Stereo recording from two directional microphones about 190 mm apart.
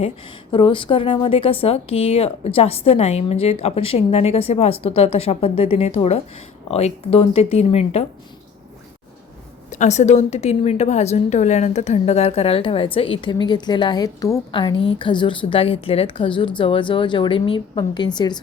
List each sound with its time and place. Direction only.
0.5 s a woman's voice: 25° left (ahead or behind)
9.7 s a woman's voice: 40° left (ahead or behind); by 18.3 s 20° left (ahead or behind)